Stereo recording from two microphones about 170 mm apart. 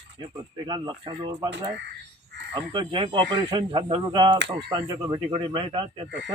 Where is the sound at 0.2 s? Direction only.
25° right (ahead or behind).